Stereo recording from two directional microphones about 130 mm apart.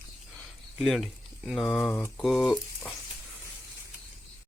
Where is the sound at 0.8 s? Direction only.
Centre (ahead or behind).